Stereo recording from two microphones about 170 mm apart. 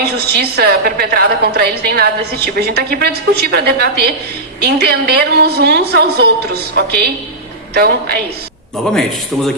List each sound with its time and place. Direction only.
0.0 s a woman's voice: 70° right (ahead or behind)
8.9 s speech: centre (ahead or behind)